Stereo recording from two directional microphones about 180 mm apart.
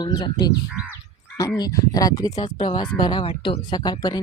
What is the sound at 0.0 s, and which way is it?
Speech, 25° left (ahead or behind).